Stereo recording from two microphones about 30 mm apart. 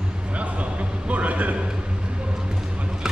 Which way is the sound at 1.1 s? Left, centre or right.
Right.